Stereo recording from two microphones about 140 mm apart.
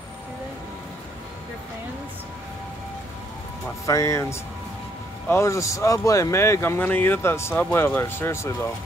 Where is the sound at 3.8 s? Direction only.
20° left (ahead or behind).